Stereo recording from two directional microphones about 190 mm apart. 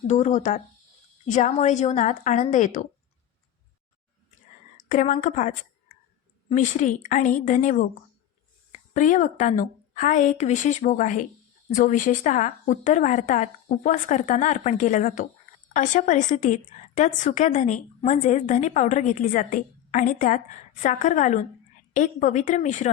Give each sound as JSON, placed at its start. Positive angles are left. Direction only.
{"t": 0.1, "sound": "a woman's voice", "side_deg": 40}
{"t": 4.9, "sound": "a woman's voice", "side_deg": 40}